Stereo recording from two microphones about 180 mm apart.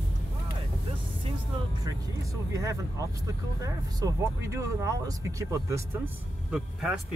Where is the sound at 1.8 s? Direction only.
20° right (ahead or behind).